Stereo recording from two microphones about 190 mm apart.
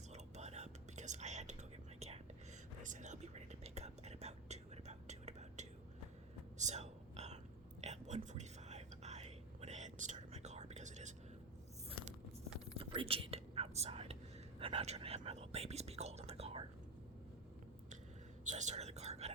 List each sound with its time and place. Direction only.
0.1 s whispering: 35° right (ahead or behind)
12.7 s whispering: 30° right (ahead or behind)
18.4 s whispering: 40° right (ahead or behind)